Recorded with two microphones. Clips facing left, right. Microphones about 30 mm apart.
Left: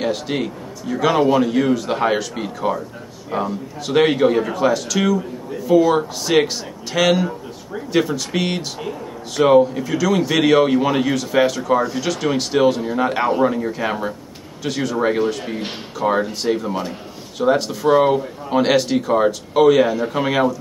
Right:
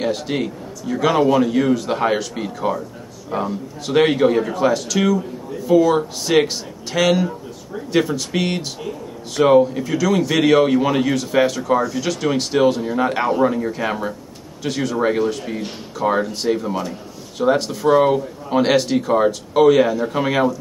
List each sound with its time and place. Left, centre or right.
0.0 s a man's voice: centre